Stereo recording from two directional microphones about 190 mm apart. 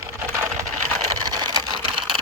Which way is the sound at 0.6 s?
40° right (ahead or behind).